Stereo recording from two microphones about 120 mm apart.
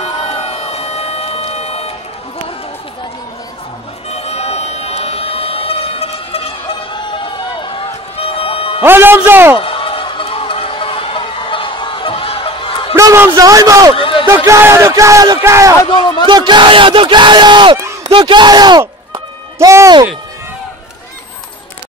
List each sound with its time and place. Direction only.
0.0 s crowd: 60° left (ahead or behind)
4.1 s music: 60° left (ahead or behind)
8.8 s a man's voice: 15° right (ahead or behind)
9.6 s a sound: 50° left (ahead or behind)
12.9 s a man's voice: 25° right (ahead or behind)
13.9 s speech: 45° left (ahead or behind)
14.2 s a man's voice: 25° right (ahead or behind)
16.3 s speech: 40° right (ahead or behind)
18.0 s music: 40° right (ahead or behind)